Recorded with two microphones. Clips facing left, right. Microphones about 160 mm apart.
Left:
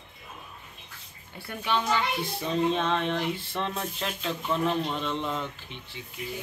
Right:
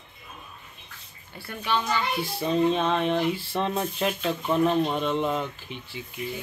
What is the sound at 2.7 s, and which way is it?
Speech, 5° right (ahead or behind).